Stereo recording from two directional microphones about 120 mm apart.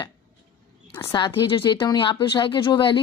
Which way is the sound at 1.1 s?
40° left (ahead or behind).